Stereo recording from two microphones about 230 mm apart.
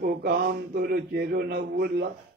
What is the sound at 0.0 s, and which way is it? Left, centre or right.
Speech, right.